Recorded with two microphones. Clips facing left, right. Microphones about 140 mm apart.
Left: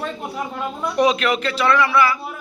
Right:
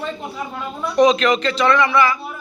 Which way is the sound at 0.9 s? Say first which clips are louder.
Right 4 dB; 10° left (ahead or behind).